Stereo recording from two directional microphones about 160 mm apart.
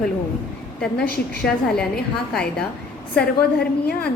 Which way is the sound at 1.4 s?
5° left (ahead or behind).